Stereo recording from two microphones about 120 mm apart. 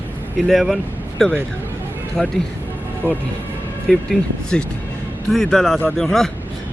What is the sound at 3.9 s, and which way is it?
Speech, 5° left (ahead or behind).